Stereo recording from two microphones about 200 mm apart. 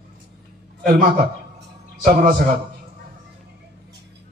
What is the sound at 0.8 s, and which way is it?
Speech, 50° right (ahead or behind).